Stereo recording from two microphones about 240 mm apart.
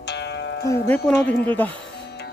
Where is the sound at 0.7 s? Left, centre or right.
Centre.